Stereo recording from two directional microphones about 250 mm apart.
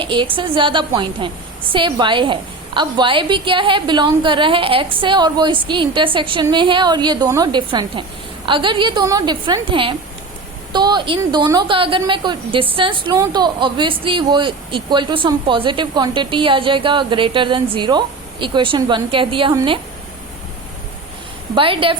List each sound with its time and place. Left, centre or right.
0.0 s a woman's voice: centre
21.5 s a woman's voice: right